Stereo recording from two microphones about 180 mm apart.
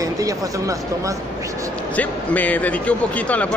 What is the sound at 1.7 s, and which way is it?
Speech, 10° left (ahead or behind).